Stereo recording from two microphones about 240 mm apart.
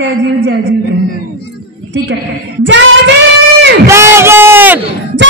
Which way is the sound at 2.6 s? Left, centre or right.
Right.